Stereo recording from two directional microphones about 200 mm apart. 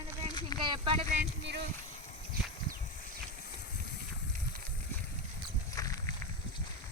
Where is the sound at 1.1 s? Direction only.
55° right (ahead or behind).